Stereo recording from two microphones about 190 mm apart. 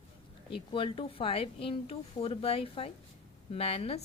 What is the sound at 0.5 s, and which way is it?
A woman's voice, 25° left (ahead or behind).